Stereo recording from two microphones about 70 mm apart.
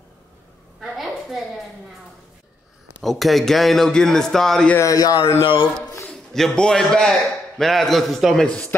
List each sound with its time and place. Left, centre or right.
0.7 s a sound: centre
3.0 s a man's voice: centre
4.7 s speech: left
6.3 s a man's voice: centre